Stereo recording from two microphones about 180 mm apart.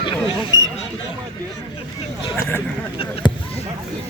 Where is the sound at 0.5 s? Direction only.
90° left.